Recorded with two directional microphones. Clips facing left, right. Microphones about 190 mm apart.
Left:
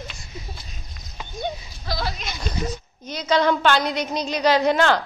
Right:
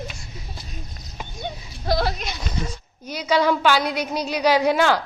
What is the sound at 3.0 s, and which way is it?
A woman's voice, 10° right (ahead or behind).